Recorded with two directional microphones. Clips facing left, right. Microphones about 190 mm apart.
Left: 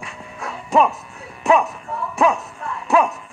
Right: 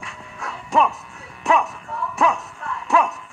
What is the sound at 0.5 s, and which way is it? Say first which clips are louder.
Music: left 3 dB; 15° left (ahead or behind).